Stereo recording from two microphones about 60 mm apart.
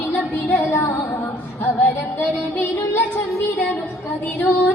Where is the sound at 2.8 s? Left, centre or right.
Left.